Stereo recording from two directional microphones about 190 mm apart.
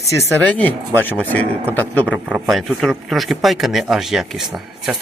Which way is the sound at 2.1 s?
5° right (ahead or behind).